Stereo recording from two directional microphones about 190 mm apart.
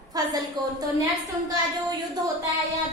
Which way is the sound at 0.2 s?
20° right (ahead or behind).